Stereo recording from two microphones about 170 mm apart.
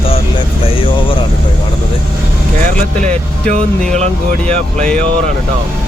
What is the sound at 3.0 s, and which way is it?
Speech, 50° right (ahead or behind).